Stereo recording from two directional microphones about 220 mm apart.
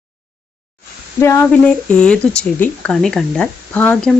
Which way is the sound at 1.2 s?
10° left (ahead or behind).